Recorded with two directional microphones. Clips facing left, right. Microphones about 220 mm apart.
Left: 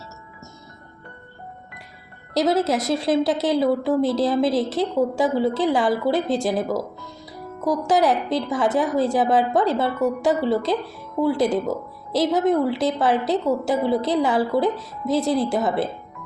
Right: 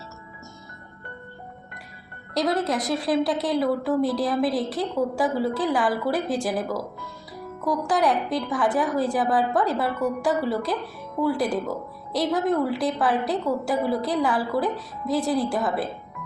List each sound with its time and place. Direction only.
2.4 s a woman's voice: 25° left (ahead or behind)